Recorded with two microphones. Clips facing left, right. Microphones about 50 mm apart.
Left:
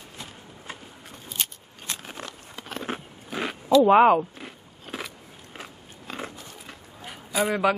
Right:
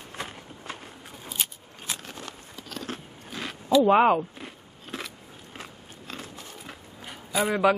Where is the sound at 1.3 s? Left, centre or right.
Centre.